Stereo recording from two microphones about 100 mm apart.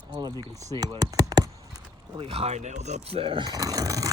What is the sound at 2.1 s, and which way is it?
Speech, 65° right (ahead or behind).